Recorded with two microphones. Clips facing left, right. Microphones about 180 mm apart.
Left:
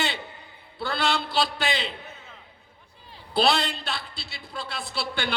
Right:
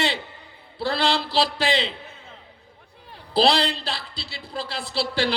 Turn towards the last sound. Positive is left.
turn(degrees=-30)  # may be behind; listen again after turning